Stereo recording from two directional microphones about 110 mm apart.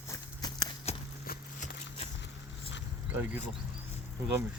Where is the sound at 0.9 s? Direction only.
70° left (ahead or behind).